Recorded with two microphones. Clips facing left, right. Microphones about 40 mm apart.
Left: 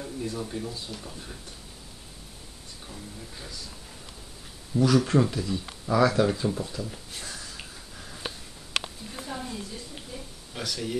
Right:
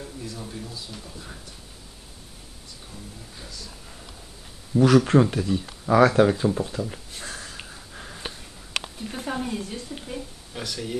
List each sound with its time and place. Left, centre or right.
0.4 s speech: centre
0.9 s speech: centre
2.9 s speech: centre
4.7 s speech: right
7.2 s a sound: right
9.1 s a woman's voice: right
10.5 s speech: centre